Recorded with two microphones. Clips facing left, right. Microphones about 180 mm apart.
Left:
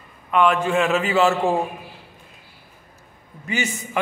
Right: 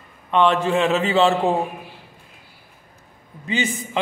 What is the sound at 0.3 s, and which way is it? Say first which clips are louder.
A man's voice: right 1 dB; 30° right (ahead or behind).